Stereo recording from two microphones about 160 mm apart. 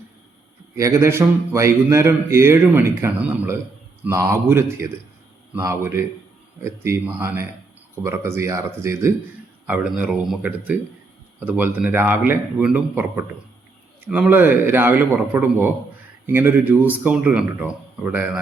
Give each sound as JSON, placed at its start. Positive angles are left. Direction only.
{"t": 0.8, "sound": "speech", "side_deg": -20}